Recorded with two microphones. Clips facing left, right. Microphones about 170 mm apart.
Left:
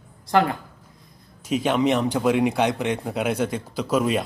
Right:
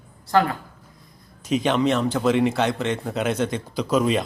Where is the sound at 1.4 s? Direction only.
5° left (ahead or behind).